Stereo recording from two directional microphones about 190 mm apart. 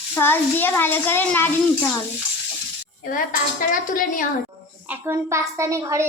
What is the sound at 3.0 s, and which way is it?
A woman's voice, 45° left (ahead or behind).